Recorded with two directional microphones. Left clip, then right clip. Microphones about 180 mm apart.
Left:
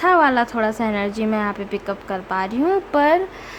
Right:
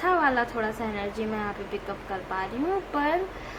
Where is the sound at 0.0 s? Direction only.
50° left (ahead or behind).